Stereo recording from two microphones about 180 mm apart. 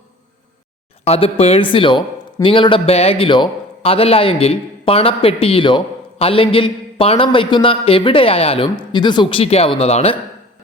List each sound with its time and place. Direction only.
1.0 s a man's voice: 35° left (ahead or behind)